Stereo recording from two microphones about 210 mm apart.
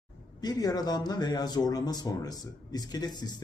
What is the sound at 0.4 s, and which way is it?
A man's voice, 20° left (ahead or behind).